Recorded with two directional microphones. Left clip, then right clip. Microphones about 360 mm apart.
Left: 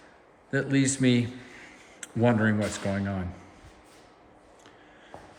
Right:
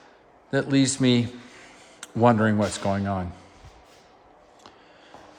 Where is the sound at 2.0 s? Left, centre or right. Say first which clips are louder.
Right 6 dB; centre.